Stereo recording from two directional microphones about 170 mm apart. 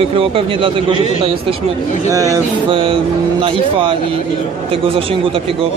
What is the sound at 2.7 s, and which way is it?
Speech, 30° right (ahead or behind).